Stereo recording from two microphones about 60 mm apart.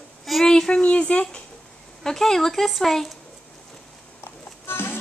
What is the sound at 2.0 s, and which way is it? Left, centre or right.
Speech, centre.